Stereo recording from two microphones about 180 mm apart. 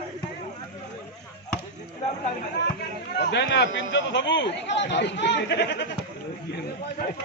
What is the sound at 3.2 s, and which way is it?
A man's voice, 75° left (ahead or behind).